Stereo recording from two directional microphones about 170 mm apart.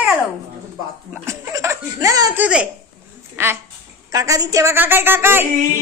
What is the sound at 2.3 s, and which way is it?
A woman's voice, 5° right (ahead or behind).